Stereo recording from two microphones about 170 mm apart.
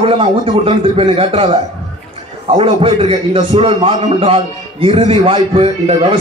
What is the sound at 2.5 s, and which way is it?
A man's voice, 35° right (ahead or behind).